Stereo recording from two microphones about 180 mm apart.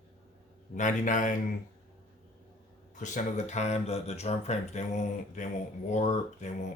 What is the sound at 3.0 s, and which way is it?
Speech, 45° left (ahead or behind).